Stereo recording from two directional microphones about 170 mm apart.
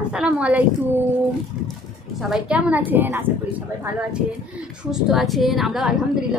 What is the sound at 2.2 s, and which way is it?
A woman's voice, 5° right (ahead or behind).